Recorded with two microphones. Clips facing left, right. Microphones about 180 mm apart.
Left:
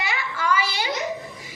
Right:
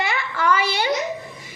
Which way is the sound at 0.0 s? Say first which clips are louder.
Right 4 dB; 60° right (ahead or behind).